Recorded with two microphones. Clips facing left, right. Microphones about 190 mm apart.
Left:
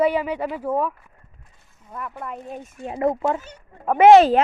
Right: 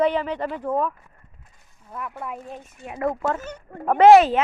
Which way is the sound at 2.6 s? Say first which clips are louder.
Left 5 dB; 30° left (ahead or behind).